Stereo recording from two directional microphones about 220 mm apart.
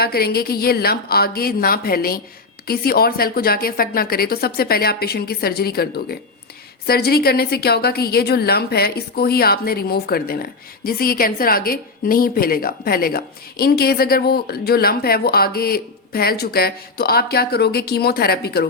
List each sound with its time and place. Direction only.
0.0 s a woman's voice: 45° left (ahead or behind)